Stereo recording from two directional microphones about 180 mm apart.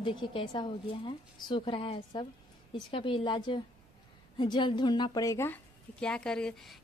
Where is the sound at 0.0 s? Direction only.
25° left (ahead or behind).